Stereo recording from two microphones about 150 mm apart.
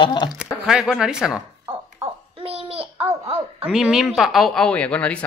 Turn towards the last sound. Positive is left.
turn(degrees=10)  # may be behind; listen again after turning